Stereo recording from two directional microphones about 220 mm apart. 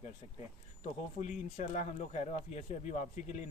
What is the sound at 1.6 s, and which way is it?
Speech, 35° left (ahead or behind).